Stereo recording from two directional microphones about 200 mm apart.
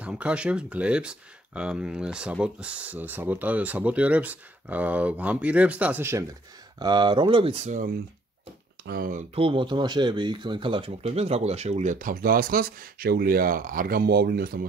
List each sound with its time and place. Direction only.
0.0 s speech: 5° right (ahead or behind)
6.8 s speech: 20° right (ahead or behind)
8.8 s speech: 45° right (ahead or behind)
9.3 s speech: 25° right (ahead or behind); by 14.6 s 50° right (ahead or behind)